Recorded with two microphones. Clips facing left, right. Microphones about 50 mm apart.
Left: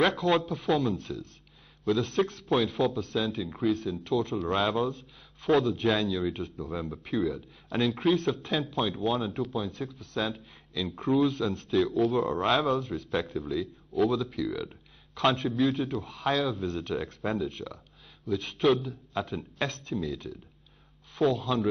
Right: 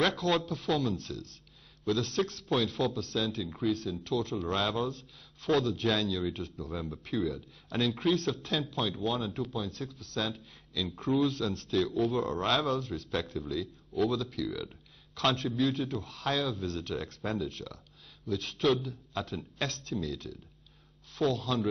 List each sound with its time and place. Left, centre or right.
0.0 s a man's voice: centre
3.4 s a man's voice: centre
14.5 s speech: centre
15.1 s a man's voice: centre